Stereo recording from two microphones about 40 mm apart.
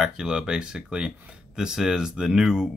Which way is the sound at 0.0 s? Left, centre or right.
Centre.